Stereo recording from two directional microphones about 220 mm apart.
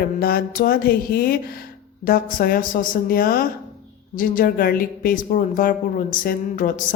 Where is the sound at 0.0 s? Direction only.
45° left (ahead or behind).